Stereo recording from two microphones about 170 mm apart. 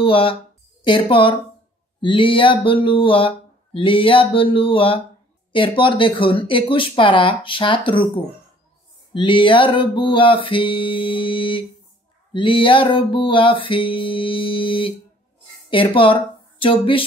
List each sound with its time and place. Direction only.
0.0 s speech: 30° left (ahead or behind)